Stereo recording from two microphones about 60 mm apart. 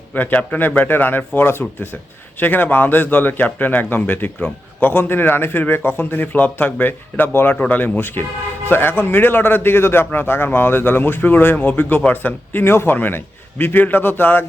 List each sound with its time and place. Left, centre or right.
0.1 s a man's voice: left